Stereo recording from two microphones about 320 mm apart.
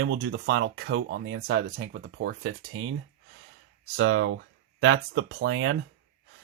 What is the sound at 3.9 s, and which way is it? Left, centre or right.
Speech, right.